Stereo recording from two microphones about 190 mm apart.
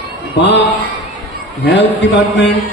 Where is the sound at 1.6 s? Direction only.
65° left (ahead or behind).